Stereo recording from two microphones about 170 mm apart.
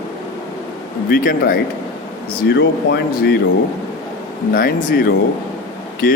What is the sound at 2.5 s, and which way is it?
Speech, 80° left.